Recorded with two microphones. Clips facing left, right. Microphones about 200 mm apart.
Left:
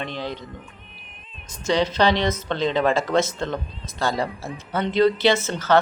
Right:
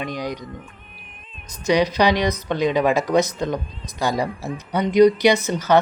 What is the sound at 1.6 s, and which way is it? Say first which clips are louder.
Speech: right 2 dB; 15° right (ahead or behind).